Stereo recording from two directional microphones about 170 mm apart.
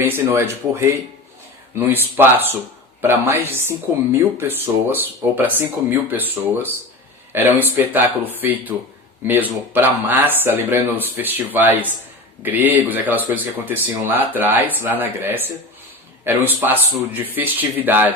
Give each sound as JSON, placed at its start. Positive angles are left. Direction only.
{"t": 0.0, "sound": "speech", "side_deg": -15}